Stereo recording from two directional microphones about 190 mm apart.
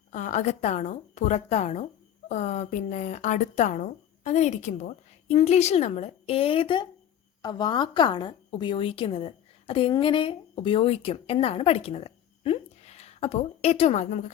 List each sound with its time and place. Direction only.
0.1 s a woman's voice: 40° left (ahead or behind)